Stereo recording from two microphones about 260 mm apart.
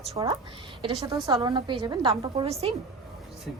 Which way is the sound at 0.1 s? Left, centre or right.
Right.